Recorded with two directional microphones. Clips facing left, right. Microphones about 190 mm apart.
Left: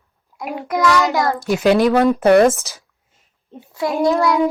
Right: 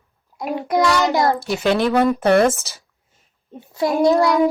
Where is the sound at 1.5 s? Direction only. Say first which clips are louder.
Left 5 dB; 10° left (ahead or behind).